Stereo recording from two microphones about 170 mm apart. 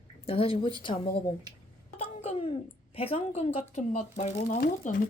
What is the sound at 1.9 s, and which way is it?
Wail, 35° left (ahead or behind).